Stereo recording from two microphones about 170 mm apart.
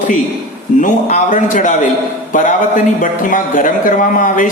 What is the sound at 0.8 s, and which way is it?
Speech, 45° left (ahead or behind).